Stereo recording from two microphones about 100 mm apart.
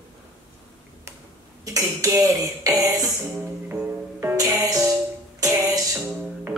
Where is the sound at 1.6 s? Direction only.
35° right (ahead or behind).